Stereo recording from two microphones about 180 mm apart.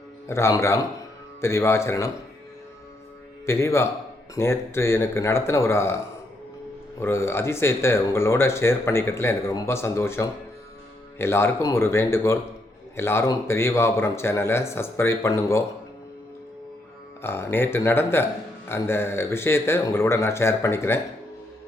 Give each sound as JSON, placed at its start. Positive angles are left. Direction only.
{"t": 0.3, "sound": "speech", "side_deg": 15}
{"t": 3.4, "sound": "speech", "side_deg": 15}
{"t": 7.0, "sound": "speech", "side_deg": 15}
{"t": 17.2, "sound": "speech", "side_deg": 10}